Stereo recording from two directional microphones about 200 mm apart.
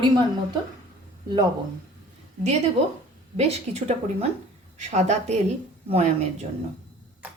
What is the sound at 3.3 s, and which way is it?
Speech, 30° right (ahead or behind).